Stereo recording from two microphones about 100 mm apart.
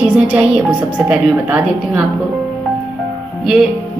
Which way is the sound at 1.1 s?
15° right (ahead or behind).